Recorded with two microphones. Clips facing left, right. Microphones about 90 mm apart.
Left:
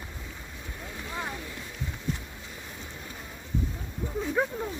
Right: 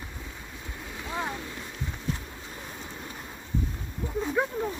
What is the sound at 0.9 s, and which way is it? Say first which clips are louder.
Boat: right 3 dB; 20° right (ahead or behind).